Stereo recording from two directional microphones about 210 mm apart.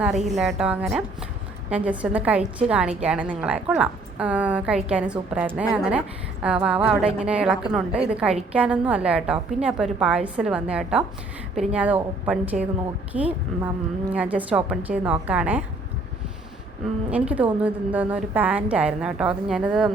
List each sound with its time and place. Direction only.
0.0 s a woman's voice: centre (ahead or behind)
13.1 s speech: 35° right (ahead or behind)
14.1 s a woman's voice: 5° right (ahead or behind)
17.1 s a woman's voice: 5° right (ahead or behind)